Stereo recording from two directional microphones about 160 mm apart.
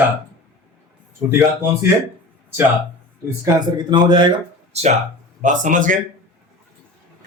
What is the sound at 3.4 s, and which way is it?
Speech, 25° right (ahead or behind).